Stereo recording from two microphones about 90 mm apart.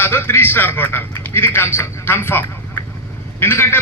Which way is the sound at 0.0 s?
25° left (ahead or behind).